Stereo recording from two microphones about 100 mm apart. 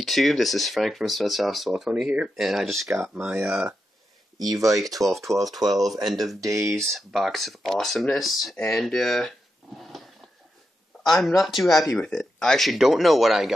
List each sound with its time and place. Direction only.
0.0 s speech: centre (ahead or behind)
3.2 s speech: 15° right (ahead or behind)
4.4 s speech: 35° right (ahead or behind)
5.0 s speech: centre (ahead or behind)
6.4 s speech: 30° right (ahead or behind)
6.8 s speech: centre (ahead or behind)
11.1 s speech: centre (ahead or behind)